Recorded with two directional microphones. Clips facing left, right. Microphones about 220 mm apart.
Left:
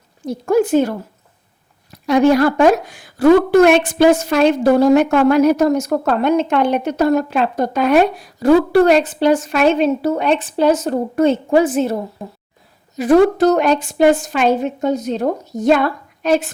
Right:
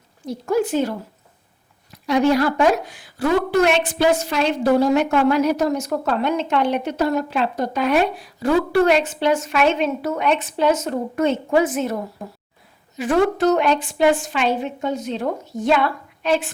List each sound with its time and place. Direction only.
0.3 s a woman's voice: 45° left (ahead or behind)
2.0 s a woman's voice: 50° left (ahead or behind)